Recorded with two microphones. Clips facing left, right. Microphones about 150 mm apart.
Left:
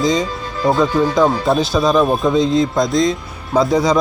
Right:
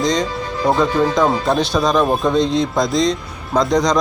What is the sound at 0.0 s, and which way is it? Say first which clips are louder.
Speech: left 1 dB; 5° left (ahead or behind).